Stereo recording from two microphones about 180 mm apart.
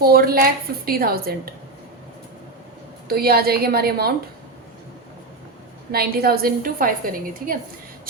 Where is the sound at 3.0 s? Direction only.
60° right (ahead or behind).